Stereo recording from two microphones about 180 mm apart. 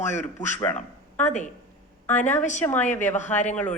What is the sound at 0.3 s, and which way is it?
Speech, 10° left (ahead or behind).